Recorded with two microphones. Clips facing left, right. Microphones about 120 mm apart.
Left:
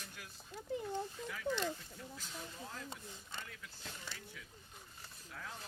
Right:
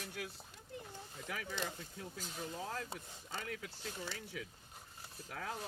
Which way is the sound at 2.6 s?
90° right.